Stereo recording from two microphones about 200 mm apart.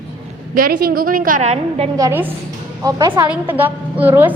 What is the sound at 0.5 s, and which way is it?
A woman's voice, 45° right (ahead or behind).